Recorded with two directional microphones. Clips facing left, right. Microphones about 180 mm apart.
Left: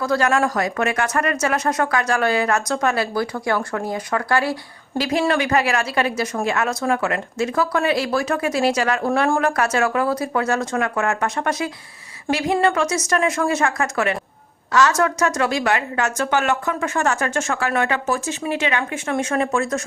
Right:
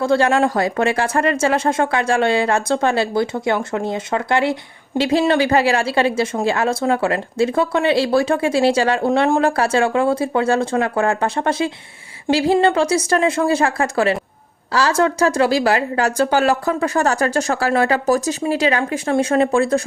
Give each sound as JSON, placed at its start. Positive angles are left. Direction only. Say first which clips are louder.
{"t": 0.0, "sound": "speech", "louder": "right 4 dB", "side_deg": -25}